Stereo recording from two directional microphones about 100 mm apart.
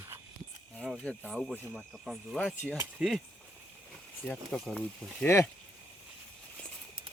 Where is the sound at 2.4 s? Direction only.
15° left (ahead or behind).